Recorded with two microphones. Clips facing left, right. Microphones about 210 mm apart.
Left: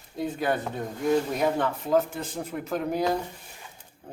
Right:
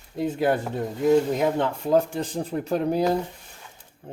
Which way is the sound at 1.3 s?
25° right (ahead or behind).